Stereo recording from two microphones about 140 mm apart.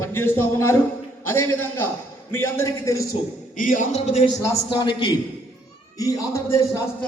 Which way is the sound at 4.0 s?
45° left (ahead or behind).